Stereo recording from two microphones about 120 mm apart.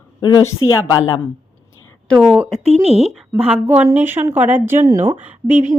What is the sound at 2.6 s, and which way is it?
Speech, 60° right (ahead or behind).